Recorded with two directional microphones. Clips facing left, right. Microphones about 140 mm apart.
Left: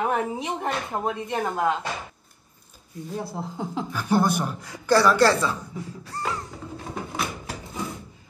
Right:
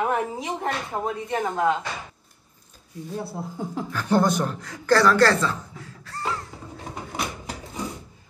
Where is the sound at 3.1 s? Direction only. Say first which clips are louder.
Even; 15° left (ahead or behind).